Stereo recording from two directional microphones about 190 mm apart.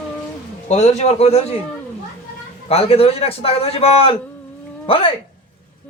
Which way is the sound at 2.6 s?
30° left (ahead or behind).